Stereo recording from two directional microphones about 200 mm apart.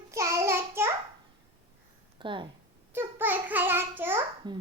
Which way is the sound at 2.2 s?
25° right (ahead or behind).